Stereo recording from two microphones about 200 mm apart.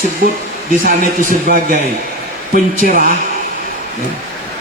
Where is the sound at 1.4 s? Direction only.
45° right (ahead or behind).